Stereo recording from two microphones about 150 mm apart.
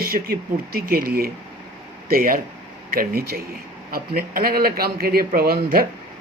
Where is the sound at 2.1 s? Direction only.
75° right (ahead or behind).